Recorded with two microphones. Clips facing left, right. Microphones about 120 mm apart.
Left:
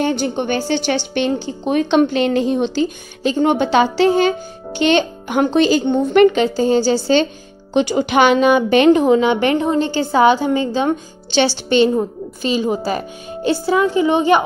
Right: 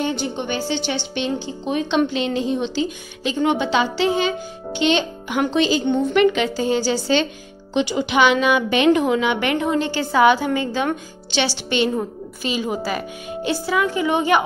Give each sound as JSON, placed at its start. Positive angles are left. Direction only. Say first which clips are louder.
{"t": 0.0, "sound": "a woman's voice", "louder": "left 5 dB", "side_deg": 50}